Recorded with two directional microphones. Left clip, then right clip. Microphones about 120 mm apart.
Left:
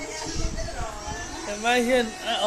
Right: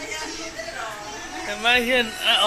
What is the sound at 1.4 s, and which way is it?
Speech, 30° left (ahead or behind).